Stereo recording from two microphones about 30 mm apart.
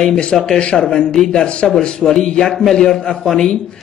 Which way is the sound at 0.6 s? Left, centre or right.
Left.